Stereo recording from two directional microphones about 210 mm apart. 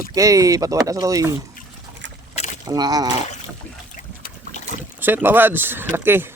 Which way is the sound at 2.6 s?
20° right (ahead or behind).